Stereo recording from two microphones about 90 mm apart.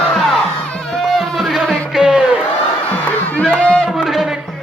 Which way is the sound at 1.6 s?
5° right (ahead or behind).